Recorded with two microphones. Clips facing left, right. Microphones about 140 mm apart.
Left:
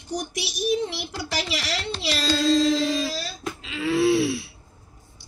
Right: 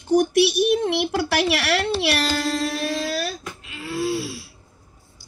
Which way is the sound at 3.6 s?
90° left.